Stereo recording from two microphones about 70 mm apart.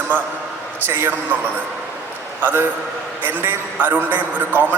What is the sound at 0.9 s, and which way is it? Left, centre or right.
Speech, right.